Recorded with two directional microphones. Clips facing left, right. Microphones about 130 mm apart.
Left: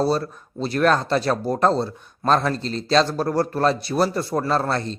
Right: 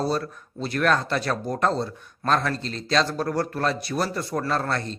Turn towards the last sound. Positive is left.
turn(degrees=30)  # may be behind; listen again after turning